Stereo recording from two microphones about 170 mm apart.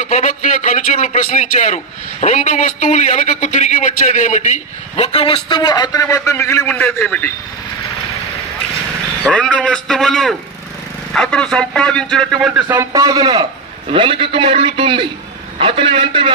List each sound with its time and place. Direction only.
0.0 s a man's voice: 50° left (ahead or behind); by 7.2 s 10° left (ahead or behind)
9.2 s speech: 5° left (ahead or behind)
12.5 s a man's voice: 20° right (ahead or behind)